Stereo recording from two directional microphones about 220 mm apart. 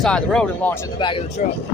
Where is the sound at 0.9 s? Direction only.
20° left (ahead or behind).